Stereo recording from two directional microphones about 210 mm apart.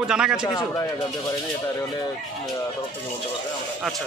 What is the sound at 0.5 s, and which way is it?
Speech, 15° left (ahead or behind).